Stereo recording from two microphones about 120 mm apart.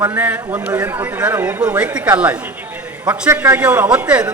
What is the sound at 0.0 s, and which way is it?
A man's voice, 10° right (ahead or behind).